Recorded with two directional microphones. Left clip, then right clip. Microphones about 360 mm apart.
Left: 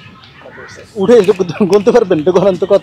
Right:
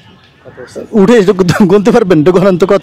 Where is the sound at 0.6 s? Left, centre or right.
Right.